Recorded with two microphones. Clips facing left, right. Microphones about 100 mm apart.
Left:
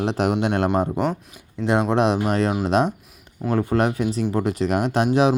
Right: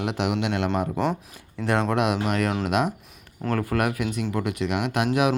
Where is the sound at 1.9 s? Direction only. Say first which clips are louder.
Left 4 dB; 30° left (ahead or behind).